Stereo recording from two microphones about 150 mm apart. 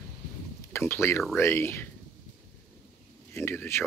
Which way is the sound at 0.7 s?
15° left (ahead or behind).